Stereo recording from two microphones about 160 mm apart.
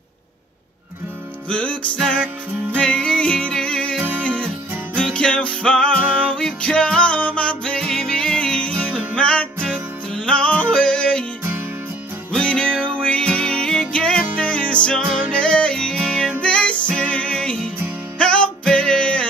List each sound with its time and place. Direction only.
1.5 s music: 10° left (ahead or behind)
10.1 s yodeling: 5° left (ahead or behind)
12.4 s music: 5° left (ahead or behind)